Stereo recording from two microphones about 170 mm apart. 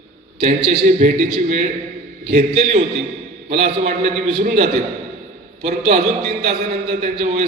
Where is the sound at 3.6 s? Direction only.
40° right (ahead or behind).